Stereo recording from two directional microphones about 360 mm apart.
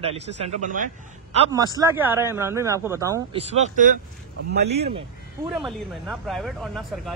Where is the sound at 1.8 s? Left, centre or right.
Centre; by 4.7 s right.